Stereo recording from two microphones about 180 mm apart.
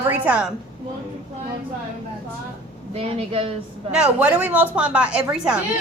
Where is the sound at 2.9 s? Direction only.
30° right (ahead or behind).